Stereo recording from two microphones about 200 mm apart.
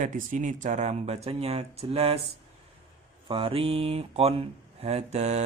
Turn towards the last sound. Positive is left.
turn(degrees=-30)  # may be behind; listen again after turning